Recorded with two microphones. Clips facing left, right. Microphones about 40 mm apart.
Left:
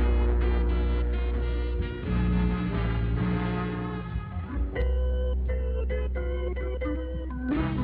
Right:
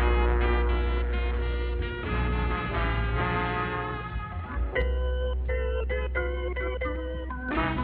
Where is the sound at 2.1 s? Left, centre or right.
Right.